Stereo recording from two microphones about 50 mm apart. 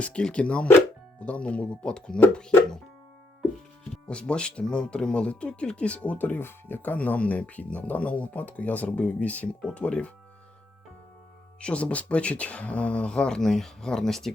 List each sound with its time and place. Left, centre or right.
0.0 s speech: left
4.1 s speech: centre
11.6 s speech: left; by 14.3 s centre